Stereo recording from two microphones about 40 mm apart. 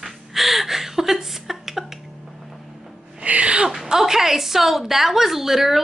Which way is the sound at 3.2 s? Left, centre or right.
Right.